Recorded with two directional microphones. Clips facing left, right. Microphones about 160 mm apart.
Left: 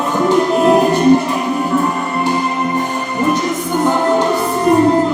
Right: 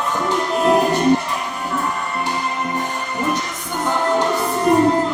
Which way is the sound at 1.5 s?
25° left (ahead or behind).